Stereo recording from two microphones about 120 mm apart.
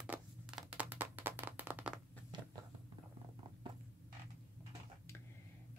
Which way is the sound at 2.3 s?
40° right (ahead or behind).